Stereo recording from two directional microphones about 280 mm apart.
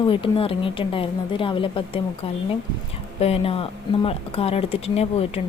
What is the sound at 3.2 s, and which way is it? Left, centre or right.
A woman's voice, left.